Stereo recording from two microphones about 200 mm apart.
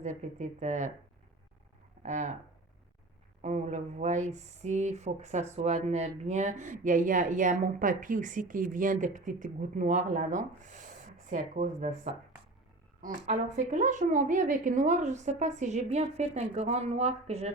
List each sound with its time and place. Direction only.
0.0 s speech: 35° right (ahead or behind)
2.0 s speech: 35° right (ahead or behind)
3.4 s speech: 35° right (ahead or behind)